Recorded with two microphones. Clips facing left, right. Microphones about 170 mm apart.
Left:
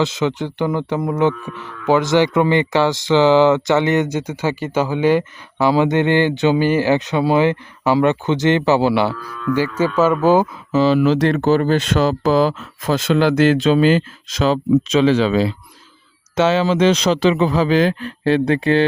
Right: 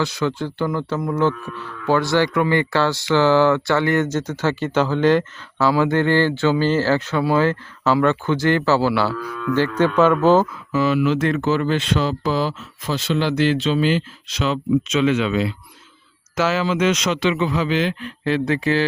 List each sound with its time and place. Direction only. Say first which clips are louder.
0.0 s speech: left 3 dB; 20° left (ahead or behind)
9.6 s speech: right 1 dB; 5° left (ahead or behind)
10.4 s speech: left 4 dB; 25° left (ahead or behind); by 18.3 s 40° left (ahead or behind)
18.3 s speech: left 4 dB; 30° left (ahead or behind)